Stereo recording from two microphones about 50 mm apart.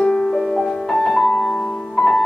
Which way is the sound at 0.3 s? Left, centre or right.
Centre.